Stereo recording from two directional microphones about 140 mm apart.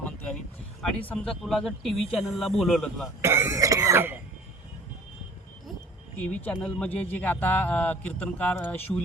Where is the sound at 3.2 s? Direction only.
20° right (ahead or behind).